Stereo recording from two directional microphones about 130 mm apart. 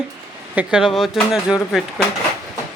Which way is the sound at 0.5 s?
10° right (ahead or behind).